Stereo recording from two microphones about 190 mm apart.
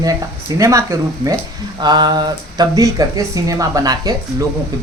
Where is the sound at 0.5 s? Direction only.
15° right (ahead or behind).